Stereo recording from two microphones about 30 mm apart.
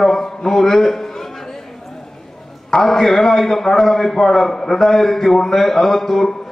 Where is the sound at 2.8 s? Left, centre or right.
Centre.